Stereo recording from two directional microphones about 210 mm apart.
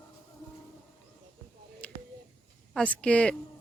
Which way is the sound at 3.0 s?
5° left (ahead or behind).